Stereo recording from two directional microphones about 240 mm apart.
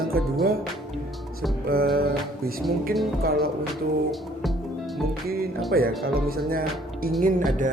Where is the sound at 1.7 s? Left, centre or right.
Right.